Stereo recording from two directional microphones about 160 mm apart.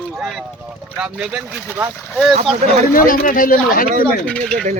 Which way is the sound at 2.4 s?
40° right (ahead or behind).